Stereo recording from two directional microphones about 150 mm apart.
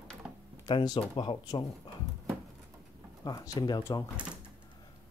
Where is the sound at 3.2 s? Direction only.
20° left (ahead or behind).